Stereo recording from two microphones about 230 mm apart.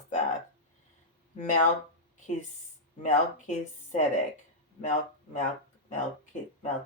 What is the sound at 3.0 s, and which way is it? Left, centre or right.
Speech, left.